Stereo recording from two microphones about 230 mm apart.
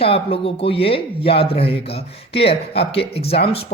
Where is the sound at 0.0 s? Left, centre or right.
Left.